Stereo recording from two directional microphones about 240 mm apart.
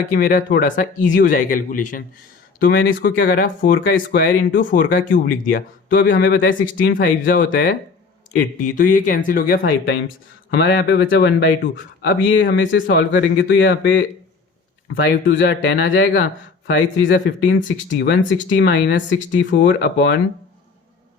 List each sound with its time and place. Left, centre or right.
0.1 s speech: left